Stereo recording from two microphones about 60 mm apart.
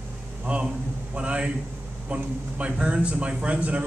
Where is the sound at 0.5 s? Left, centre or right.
Right.